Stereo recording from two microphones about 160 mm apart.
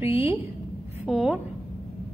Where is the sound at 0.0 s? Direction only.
15° right (ahead or behind).